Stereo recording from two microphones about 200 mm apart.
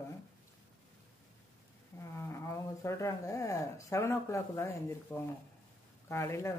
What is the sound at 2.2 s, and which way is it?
Speech, 15° left (ahead or behind).